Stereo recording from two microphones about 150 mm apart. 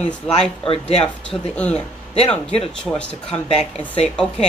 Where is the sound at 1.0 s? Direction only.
5° left (ahead or behind).